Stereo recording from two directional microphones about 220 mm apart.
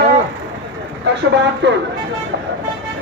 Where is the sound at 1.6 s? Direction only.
55° right (ahead or behind).